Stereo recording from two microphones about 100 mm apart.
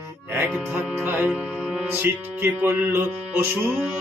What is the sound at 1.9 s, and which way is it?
A man's voice, 20° right (ahead or behind).